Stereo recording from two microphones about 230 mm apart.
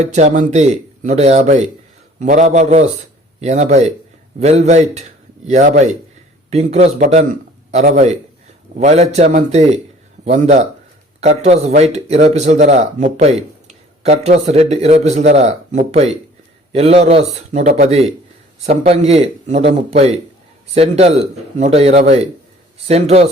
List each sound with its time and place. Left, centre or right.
0.0 s a man's voice: right